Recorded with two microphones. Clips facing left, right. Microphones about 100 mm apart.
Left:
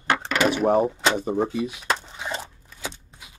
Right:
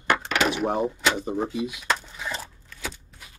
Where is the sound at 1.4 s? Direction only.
30° left (ahead or behind).